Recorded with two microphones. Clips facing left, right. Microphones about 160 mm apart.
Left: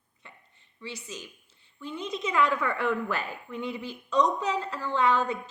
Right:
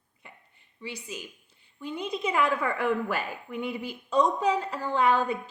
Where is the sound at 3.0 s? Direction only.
10° right (ahead or behind).